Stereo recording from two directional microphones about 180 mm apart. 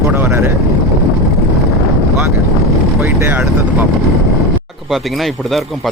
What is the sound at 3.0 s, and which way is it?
Vehicle, 10° right (ahead or behind).